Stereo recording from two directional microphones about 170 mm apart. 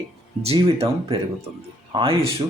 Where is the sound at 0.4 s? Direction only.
35° right (ahead or behind).